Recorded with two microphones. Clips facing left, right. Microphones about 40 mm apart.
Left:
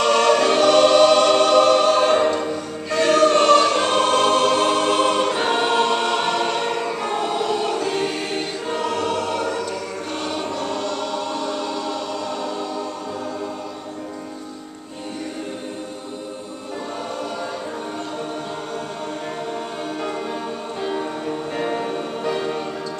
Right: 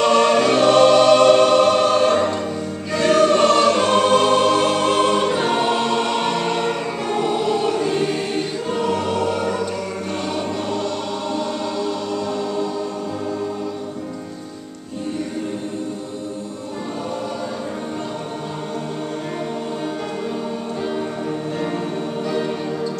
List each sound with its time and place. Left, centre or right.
0.0 s choir: centre
0.8 s music: centre
2.0 s choir: centre
21.5 s music: centre